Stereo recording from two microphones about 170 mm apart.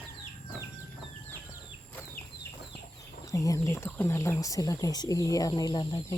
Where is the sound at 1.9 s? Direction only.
10° left (ahead or behind).